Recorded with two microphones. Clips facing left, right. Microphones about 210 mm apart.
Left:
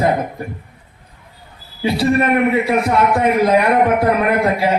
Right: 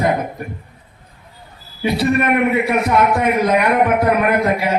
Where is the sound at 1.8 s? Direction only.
30° left (ahead or behind).